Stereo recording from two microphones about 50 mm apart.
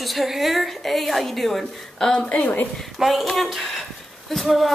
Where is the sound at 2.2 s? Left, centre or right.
Left.